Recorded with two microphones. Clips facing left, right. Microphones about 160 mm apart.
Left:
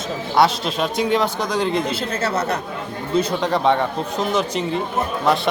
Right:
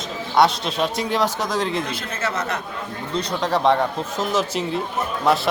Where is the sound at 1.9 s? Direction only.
30° left (ahead or behind).